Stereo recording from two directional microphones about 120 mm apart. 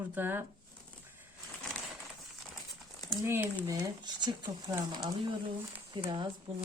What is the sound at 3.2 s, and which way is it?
Speech, 20° right (ahead or behind).